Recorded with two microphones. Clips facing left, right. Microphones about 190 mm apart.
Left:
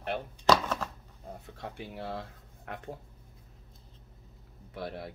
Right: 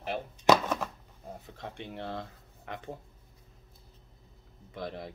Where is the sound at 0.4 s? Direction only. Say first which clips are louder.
Right 2 dB; 15° right (ahead or behind).